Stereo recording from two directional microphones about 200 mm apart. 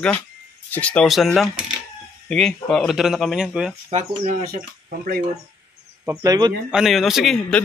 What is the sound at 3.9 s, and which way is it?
Speech, 35° right (ahead or behind).